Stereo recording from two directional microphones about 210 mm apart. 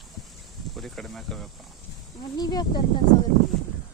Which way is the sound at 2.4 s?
20° left (ahead or behind).